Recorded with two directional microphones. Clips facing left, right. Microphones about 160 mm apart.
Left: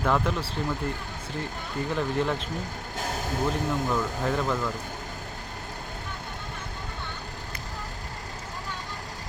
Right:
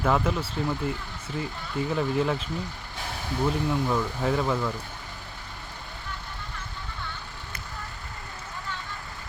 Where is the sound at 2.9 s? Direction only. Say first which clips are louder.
Left 3 dB; 45° left (ahead or behind).